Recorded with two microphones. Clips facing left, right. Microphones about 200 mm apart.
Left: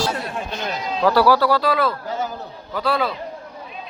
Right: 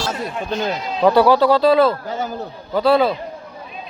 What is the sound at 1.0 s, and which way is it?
Speech, 20° right (ahead or behind).